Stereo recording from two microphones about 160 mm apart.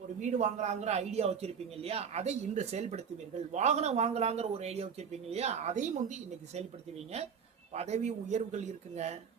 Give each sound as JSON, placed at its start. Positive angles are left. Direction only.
{"t": 0.2, "sound": "speech", "side_deg": -50}
{"t": 7.7, "sound": "speech", "side_deg": -45}